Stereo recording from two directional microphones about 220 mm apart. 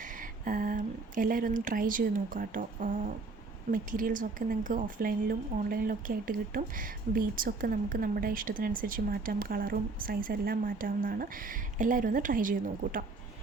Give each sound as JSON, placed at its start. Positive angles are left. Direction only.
{"t": 0.0, "sound": "speech", "side_deg": -40}